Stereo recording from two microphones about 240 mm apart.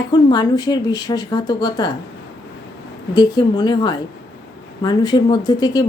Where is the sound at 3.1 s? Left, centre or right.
Centre.